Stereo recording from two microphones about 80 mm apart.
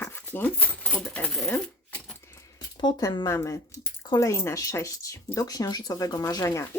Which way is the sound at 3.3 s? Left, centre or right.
Left.